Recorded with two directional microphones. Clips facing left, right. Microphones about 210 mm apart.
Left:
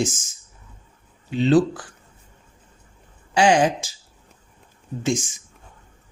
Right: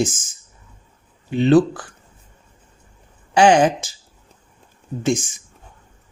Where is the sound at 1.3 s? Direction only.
55° right (ahead or behind).